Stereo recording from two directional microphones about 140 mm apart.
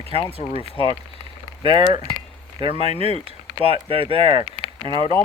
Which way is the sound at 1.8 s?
30° right (ahead or behind).